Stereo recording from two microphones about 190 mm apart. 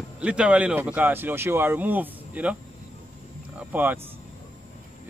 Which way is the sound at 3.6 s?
10° right (ahead or behind).